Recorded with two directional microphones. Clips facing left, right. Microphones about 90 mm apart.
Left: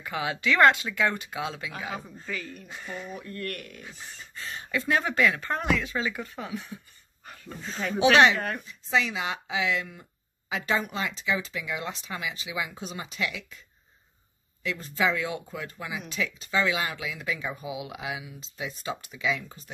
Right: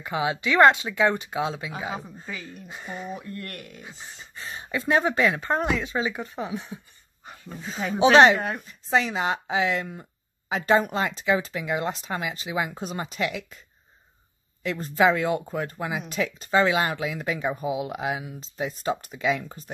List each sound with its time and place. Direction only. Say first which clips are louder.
0.0 s speech: right 3 dB; 25° right (ahead or behind)
7.2 s speech: right 2 dB; 10° right (ahead or behind)
8.0 s speech: right 4 dB; 30° right (ahead or behind)
8.4 s speech: right 2 dB; 10° right (ahead or behind)
8.6 s speech: right 4 dB; 40° right (ahead or behind)